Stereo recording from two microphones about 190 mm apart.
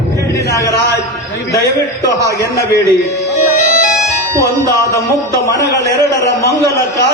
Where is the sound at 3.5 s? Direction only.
40° left (ahead or behind).